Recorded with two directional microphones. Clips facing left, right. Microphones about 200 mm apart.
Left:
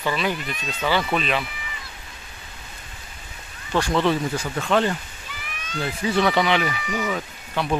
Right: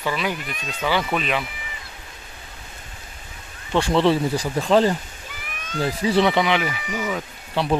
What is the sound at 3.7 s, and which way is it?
Speech, 30° right (ahead or behind).